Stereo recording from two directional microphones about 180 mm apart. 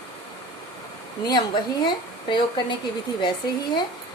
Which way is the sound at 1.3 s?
25° left (ahead or behind).